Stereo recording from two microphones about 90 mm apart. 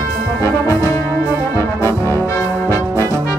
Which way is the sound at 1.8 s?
35° left (ahead or behind).